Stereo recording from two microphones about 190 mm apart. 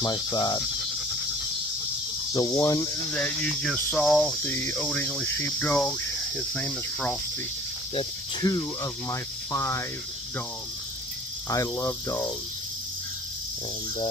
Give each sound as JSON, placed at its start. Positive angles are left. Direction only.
{"t": 0.0, "sound": "speech", "side_deg": 20}
{"t": 2.3, "sound": "speech", "side_deg": 20}
{"t": 4.5, "sound": "speech", "side_deg": 10}
{"t": 8.4, "sound": "speech", "side_deg": 25}
{"t": 9.1, "sound": "speech", "side_deg": 15}
{"t": 11.5, "sound": "speech", "side_deg": 15}